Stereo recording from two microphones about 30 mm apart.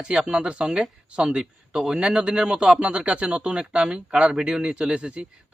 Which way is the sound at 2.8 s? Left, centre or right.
Right.